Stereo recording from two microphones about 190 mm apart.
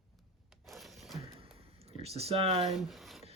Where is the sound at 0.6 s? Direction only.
Centre (ahead or behind).